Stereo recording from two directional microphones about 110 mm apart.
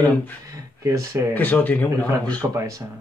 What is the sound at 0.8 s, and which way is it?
Speech, 30° right (ahead or behind).